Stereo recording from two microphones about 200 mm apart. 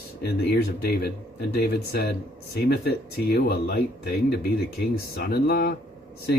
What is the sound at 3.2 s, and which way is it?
Speech, 50° left (ahead or behind).